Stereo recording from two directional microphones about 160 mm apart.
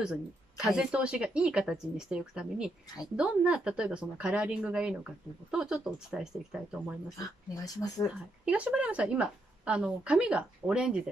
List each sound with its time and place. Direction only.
0.0 s a woman's voice: 5° right (ahead or behind)
7.2 s speech: 25° left (ahead or behind)
8.5 s a woman's voice: 10° right (ahead or behind)